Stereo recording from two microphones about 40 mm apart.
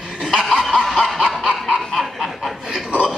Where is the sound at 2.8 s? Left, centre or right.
Centre.